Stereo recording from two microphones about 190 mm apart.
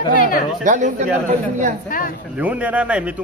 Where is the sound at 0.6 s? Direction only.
40° right (ahead or behind).